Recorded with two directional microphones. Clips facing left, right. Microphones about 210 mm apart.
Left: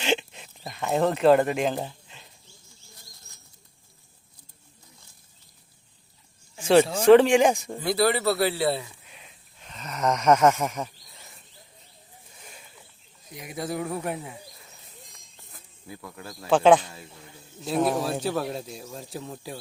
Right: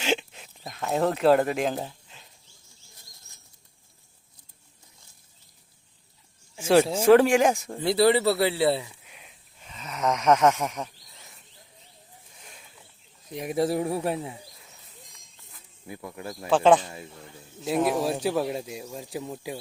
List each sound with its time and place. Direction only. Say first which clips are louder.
0.0 s a sound: left 1 dB; 5° right (ahead or behind)
6.6 s speech: left 1 dB; 5° right (ahead or behind)
7.9 s speech: right 3 dB; 25° right (ahead or behind)
9.0 s a sound: left 1 dB; 5° right (ahead or behind)
12.4 s a sound: left 3 dB; centre (ahead or behind)
13.6 s speech: right 5 dB; 30° right (ahead or behind)
15.9 s speech: right 4 dB; 20° right (ahead or behind)
16.5 s speech: left 1 dB; centre (ahead or behind)
18.0 s speech: right 2 dB; 15° right (ahead or behind)